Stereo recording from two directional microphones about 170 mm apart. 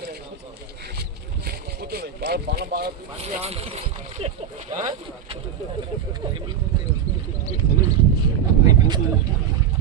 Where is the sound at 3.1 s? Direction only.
35° right (ahead or behind).